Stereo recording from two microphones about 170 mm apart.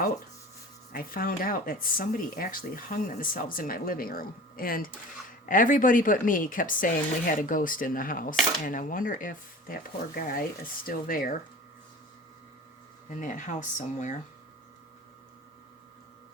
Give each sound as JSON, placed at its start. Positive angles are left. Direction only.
{"t": 0.9, "sound": "speech", "side_deg": 55}
{"t": 13.1, "sound": "speech", "side_deg": 45}